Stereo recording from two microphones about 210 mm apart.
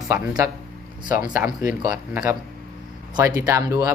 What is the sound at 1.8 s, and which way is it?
Speech, 15° right (ahead or behind).